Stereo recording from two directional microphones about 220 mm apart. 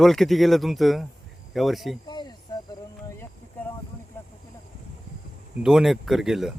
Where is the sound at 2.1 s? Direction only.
20° left (ahead or behind).